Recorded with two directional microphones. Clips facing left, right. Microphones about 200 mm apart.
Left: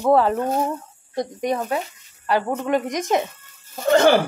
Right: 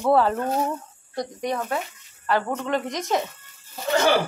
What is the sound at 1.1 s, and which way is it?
Speech, 20° left (ahead or behind).